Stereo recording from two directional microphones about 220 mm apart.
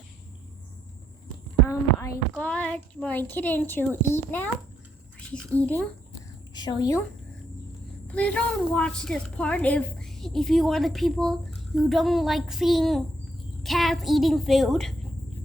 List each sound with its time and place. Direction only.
2.0 s a woman's voice: 10° left (ahead or behind)
5.5 s a woman's voice: 5° left (ahead or behind)
6.5 s a woman's voice: 20° left (ahead or behind)
8.0 s a woman's voice: 5° left (ahead or behind)